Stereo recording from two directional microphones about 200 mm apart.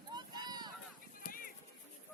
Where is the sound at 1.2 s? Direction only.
45° left (ahead or behind).